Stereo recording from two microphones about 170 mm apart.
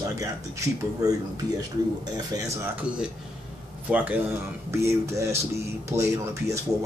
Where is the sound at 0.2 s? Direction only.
20° right (ahead or behind).